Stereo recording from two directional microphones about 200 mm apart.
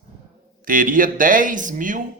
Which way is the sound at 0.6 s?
40° right (ahead or behind).